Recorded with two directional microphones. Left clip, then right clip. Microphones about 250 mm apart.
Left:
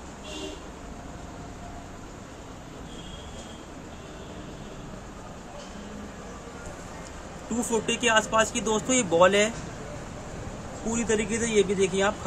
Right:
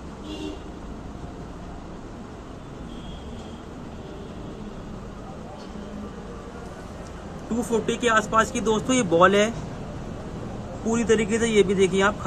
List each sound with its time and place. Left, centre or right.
7.7 s speech: centre
10.9 s speech: centre